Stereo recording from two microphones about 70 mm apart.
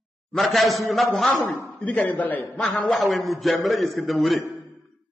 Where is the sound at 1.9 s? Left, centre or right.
Left.